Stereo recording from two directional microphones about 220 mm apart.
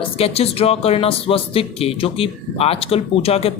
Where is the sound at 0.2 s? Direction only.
25° left (ahead or behind).